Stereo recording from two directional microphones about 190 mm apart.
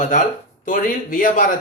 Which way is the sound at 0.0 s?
40° left (ahead or behind).